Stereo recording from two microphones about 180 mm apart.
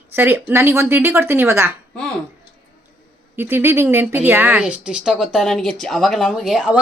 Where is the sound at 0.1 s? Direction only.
10° right (ahead or behind).